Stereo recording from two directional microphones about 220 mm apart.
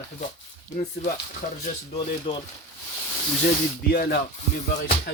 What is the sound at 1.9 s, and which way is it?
Speech, 25° left (ahead or behind).